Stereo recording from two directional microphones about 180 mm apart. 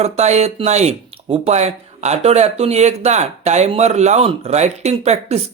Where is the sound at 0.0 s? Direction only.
40° right (ahead or behind).